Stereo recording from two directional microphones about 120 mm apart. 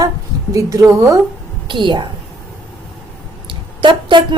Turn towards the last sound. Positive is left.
turn(degrees=-40)  # may be behind; listen again after turning